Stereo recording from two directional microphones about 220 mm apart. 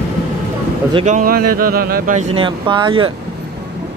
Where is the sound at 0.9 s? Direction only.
35° right (ahead or behind).